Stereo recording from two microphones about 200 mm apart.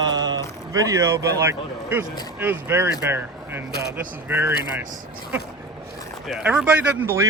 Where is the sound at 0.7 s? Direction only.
15° right (ahead or behind).